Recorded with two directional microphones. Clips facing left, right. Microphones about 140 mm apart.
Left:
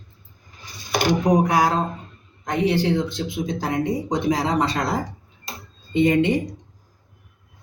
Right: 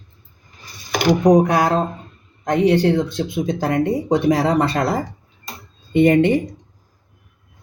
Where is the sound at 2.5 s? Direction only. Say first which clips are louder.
Right 5 dB; 55° right (ahead or behind).